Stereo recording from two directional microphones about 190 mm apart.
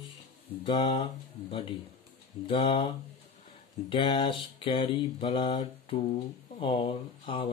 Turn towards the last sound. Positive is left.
turn(degrees=30)  # may be behind; listen again after turning